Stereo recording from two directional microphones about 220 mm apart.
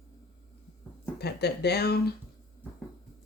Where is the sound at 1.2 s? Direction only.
50° left (ahead or behind).